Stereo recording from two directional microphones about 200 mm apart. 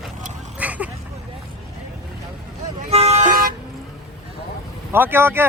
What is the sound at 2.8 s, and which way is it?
Vehicle, 30° right (ahead or behind).